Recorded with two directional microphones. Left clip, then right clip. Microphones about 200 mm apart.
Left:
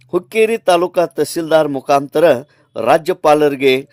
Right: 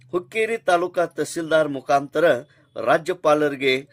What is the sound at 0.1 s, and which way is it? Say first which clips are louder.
Speech: left 9 dB; 40° left (ahead or behind).